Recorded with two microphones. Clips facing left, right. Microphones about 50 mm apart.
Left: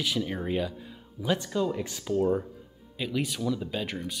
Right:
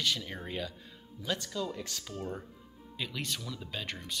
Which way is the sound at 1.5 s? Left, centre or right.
Left.